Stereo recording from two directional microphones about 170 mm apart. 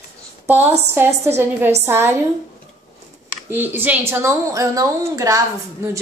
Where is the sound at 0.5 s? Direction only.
10° right (ahead or behind).